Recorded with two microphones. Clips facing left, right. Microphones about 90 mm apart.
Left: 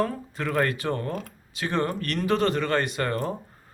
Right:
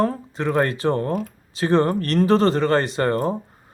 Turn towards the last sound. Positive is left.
turn(degrees=-30)  # may be behind; listen again after turning